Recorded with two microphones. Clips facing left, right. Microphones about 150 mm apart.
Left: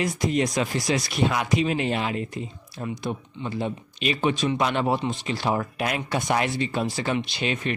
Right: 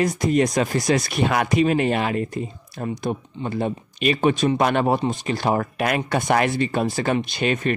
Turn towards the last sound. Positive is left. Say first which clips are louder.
# right 5 dB
turn(degrees=-50)  # may be behind; listen again after turning